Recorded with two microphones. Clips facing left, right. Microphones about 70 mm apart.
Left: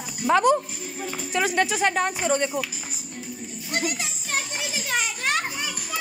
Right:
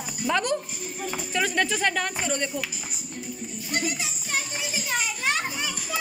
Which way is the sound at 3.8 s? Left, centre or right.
Left.